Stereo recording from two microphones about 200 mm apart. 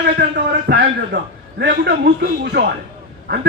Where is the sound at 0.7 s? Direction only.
60° right (ahead or behind).